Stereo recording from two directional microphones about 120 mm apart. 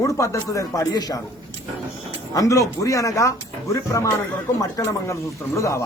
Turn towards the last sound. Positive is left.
turn(degrees=25)  # may be behind; listen again after turning